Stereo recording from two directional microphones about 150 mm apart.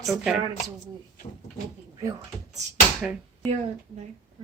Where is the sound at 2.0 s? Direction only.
20° right (ahead or behind).